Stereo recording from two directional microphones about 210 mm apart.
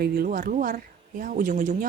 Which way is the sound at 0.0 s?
45° right (ahead or behind).